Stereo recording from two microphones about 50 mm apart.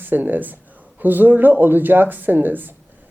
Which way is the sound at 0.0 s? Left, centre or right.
Right.